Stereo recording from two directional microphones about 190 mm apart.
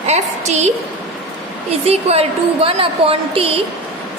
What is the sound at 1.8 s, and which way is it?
A woman's voice, 35° right (ahead or behind).